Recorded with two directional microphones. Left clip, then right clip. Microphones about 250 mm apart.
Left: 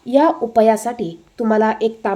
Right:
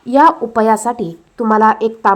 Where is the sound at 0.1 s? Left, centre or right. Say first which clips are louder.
Right 4 dB; centre.